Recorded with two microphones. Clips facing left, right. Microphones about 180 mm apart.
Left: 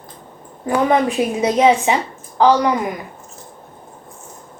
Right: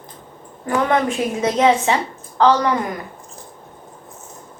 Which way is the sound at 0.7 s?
15° left (ahead or behind).